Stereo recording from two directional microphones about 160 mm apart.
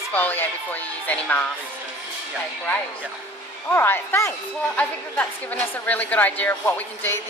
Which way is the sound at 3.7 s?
15° left (ahead or behind).